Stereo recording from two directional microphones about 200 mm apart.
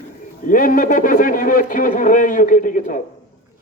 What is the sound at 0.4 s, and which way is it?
A man's voice, 40° left (ahead or behind).